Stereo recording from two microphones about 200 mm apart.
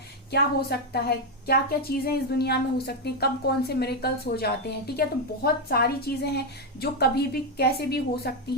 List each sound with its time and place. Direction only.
0.3 s a woman's voice: 55° left (ahead or behind)